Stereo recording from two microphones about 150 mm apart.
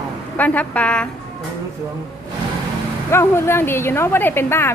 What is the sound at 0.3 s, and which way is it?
Speech, 10° left (ahead or behind).